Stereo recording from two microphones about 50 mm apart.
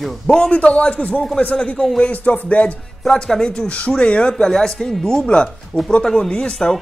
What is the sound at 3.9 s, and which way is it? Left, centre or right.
Music, left.